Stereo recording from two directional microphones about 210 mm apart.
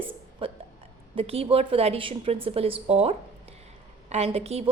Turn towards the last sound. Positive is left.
turn(degrees=-30)  # may be behind; listen again after turning